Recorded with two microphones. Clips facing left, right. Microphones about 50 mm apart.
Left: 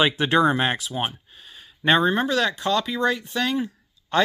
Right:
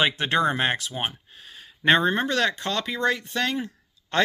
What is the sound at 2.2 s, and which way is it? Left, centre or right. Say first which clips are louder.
Speech: left 2 dB; right.